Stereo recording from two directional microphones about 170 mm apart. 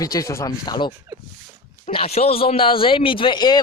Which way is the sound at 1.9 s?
35° left (ahead or behind).